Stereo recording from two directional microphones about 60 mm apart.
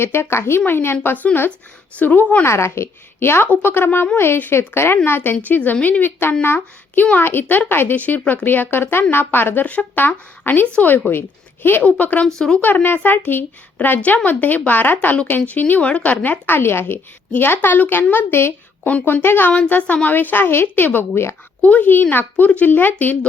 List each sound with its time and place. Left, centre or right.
0.0 s a woman's voice: left
1.0 s speech: left
2.4 s a woman's voice: left
11.8 s speech: left
12.4 s speech: centre
12.6 s a woman's voice: left
19.5 s a woman's voice: left